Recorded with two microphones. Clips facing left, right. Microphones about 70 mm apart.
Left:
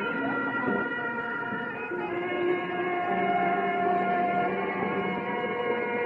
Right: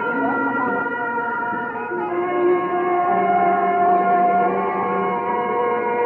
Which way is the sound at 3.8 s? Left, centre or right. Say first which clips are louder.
Right 10 dB; right.